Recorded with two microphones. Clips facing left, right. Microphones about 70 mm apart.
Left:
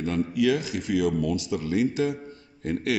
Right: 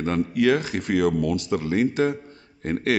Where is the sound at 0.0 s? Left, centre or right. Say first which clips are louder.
Right 3 dB; right.